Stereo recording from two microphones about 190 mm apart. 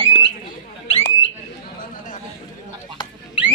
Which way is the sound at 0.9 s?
30° left (ahead or behind).